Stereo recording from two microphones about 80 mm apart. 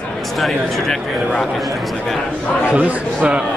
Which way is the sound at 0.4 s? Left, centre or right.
Centre.